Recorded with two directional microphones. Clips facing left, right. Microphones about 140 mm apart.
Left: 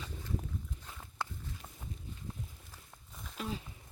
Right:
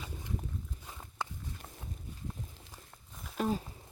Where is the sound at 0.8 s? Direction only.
15° right (ahead or behind).